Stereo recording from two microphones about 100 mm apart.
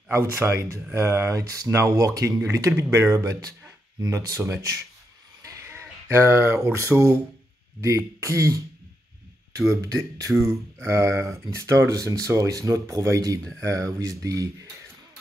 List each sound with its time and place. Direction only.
0.1 s speech: 25° right (ahead or behind)
5.4 s a sound: 30° right (ahead or behind)
7.8 s speech: 30° right (ahead or behind)
9.8 s speech: 35° right (ahead or behind)